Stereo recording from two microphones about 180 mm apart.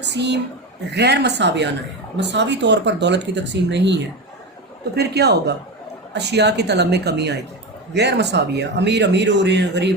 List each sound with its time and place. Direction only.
0.0 s a woman's voice: 70° right (ahead or behind)
4.9 s speech: 65° right (ahead or behind)